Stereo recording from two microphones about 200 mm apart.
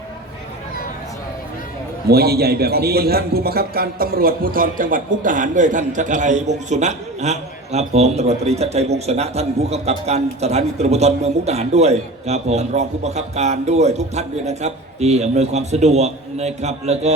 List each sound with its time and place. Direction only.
2.0 s a man's voice: 50° right (ahead or behind); by 17.2 s 35° right (ahead or behind)